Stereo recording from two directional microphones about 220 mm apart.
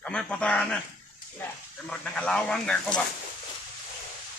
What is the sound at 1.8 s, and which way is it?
Speech, 5° left (ahead or behind).